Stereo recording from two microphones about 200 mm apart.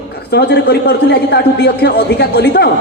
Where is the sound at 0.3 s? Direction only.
55° left (ahead or behind).